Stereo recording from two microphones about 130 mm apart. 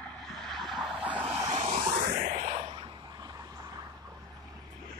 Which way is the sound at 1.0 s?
40° right (ahead or behind).